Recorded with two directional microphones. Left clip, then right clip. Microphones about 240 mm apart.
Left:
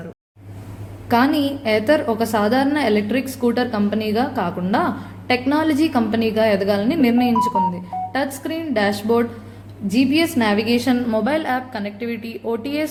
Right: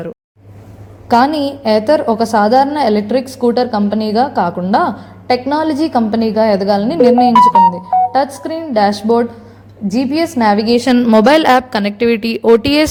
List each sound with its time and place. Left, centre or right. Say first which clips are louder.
1.0 s a woman's voice: right 6 dB; right